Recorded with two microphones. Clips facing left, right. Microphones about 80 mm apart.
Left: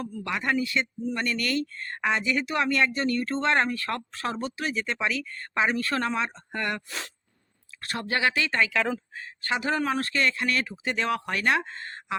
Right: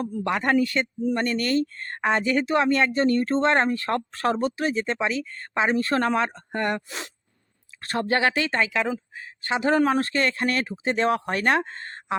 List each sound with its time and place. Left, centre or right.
0.0 s speech: right
4.1 s speech: right
6.5 s speech: right
7.8 s speech: right
8.7 s speech: centre; by 12.1 s right